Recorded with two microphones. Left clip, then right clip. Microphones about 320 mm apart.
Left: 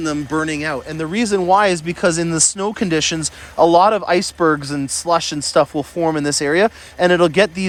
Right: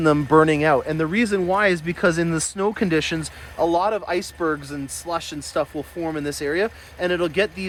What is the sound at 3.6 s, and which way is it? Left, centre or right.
Speech, left.